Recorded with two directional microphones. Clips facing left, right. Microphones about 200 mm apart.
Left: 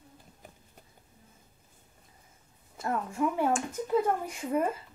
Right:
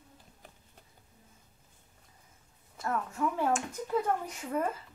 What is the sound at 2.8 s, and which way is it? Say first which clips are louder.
Speech: left 2 dB; 25° left (ahead or behind).